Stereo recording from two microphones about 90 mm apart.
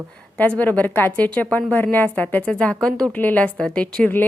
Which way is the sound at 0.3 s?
20° left (ahead or behind).